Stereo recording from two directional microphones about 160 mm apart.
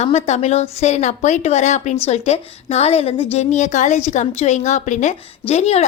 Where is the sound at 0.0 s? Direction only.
45° left (ahead or behind).